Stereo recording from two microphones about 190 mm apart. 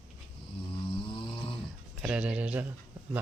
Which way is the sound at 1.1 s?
25° left (ahead or behind).